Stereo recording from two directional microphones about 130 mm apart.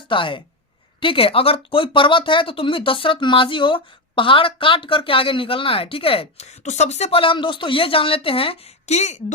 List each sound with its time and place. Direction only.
0.1 s a woman's voice: 40° left (ahead or behind); by 9.2 s 60° left (ahead or behind)